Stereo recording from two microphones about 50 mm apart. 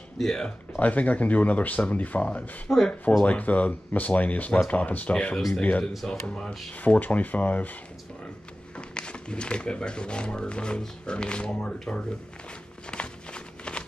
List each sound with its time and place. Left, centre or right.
0.2 s speech: centre
0.7 s speech: left
2.7 s speech: centre
3.3 s speech: left
6.0 s speech: centre
6.8 s speech: left
8.7 s speech: left
12.9 s a sound: centre